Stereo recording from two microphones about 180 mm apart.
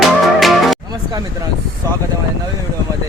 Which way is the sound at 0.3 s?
Centre (ahead or behind).